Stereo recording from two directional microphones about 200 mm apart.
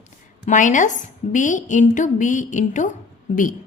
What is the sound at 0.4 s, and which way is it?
A woman's voice, 40° left (ahead or behind).